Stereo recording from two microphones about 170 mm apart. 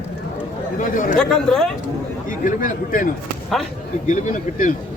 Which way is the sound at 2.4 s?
50° left (ahead or behind).